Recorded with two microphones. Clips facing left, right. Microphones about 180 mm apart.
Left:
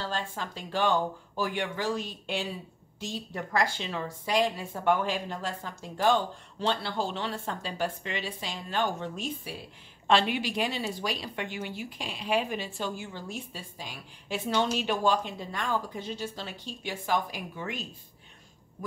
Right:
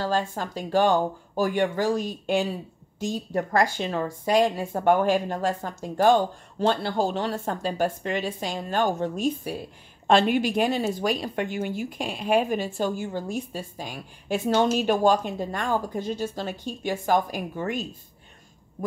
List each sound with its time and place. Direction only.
0.0 s a woman's voice: 45° right (ahead or behind)